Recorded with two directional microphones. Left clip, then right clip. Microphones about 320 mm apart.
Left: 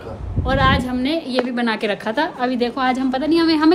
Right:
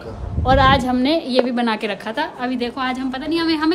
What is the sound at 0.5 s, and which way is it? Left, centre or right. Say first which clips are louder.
A woman's voice: right 4 dB; centre.